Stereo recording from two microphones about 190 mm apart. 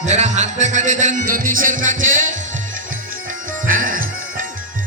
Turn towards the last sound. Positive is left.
turn(degrees=-45)  # may be behind; listen again after turning